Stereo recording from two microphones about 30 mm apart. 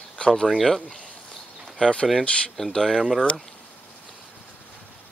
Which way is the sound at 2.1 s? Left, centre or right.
Centre.